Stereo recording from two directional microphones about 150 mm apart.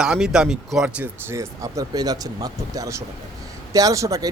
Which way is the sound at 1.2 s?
20° right (ahead or behind).